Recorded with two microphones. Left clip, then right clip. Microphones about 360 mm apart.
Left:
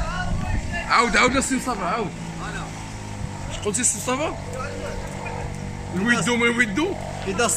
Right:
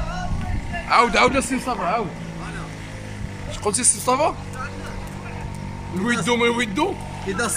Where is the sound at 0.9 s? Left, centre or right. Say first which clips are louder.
Right 2 dB; centre.